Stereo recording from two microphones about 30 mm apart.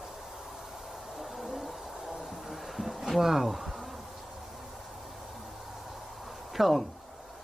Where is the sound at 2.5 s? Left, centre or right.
Centre.